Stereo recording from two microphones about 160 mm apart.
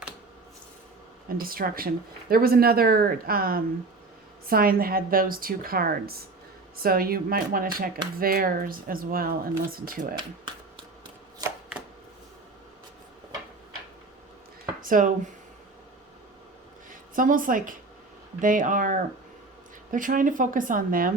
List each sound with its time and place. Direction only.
1.3 s a woman's voice: 65° right (ahead or behind)
14.8 s speech: 55° right (ahead or behind)
16.9 s a woman's voice: 55° right (ahead or behind)